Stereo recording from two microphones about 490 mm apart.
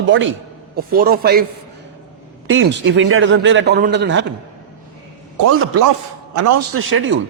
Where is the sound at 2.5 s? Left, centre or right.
Right.